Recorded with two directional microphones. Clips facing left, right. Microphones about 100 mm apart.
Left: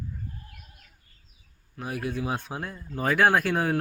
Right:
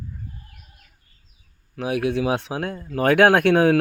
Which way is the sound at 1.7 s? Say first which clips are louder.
Right 9 dB; 85° right.